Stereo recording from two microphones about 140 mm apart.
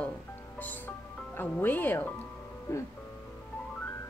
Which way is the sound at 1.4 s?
15° left (ahead or behind).